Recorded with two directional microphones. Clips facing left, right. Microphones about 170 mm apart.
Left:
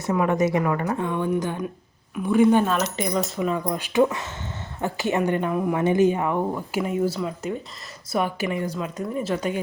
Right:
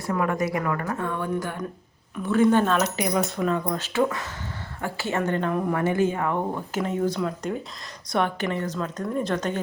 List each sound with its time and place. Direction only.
0.0 s a woman's voice: 20° left (ahead or behind)
2.9 s a woman's voice: 5° right (ahead or behind)